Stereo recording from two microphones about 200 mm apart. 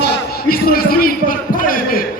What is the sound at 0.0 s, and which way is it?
A man's voice, 45° left (ahead or behind).